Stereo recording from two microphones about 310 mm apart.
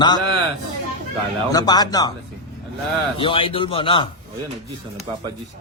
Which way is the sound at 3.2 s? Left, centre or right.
Centre.